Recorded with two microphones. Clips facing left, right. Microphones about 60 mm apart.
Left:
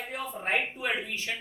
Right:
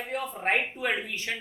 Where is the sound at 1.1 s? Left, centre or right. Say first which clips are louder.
Right 1 dB; right.